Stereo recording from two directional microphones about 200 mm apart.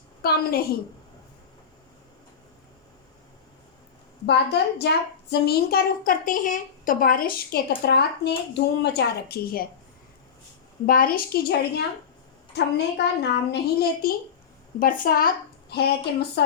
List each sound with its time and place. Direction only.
0.2 s a child's voice: 50° left (ahead or behind)
4.3 s a child's voice: 55° left (ahead or behind)
10.8 s a child's voice: 45° left (ahead or behind)